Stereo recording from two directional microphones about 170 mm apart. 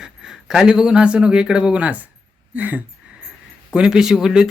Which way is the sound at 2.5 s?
10° right (ahead or behind).